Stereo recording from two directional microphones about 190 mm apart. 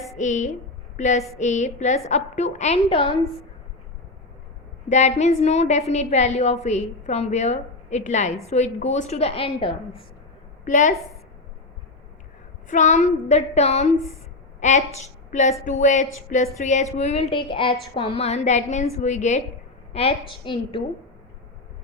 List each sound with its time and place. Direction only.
0.2 s a woman's voice: 40° left (ahead or behind)
0.9 s a sound: 40° left (ahead or behind)
1.4 s a woman's voice: 40° left (ahead or behind)
4.9 s a woman's voice: 40° left (ahead or behind)
10.7 s a woman's voice: 40° left (ahead or behind)
12.6 s a woman's voice: 40° left (ahead or behind)